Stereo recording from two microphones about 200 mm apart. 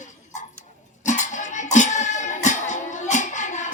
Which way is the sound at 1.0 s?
40° left (ahead or behind).